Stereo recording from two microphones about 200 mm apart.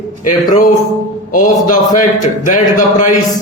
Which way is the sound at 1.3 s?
40° left (ahead or behind).